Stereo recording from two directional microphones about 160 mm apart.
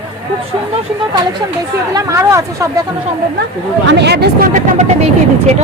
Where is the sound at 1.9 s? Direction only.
20° right (ahead or behind).